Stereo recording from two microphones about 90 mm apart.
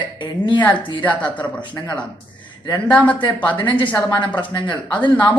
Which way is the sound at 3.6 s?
65° left (ahead or behind).